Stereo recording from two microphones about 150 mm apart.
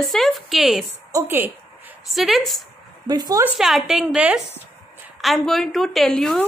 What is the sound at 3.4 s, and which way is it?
A woman's voice, 5° right (ahead or behind).